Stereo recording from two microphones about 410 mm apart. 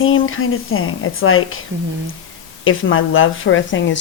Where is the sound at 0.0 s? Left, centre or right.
Left.